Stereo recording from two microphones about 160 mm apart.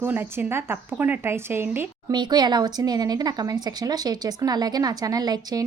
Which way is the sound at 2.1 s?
25° right (ahead or behind).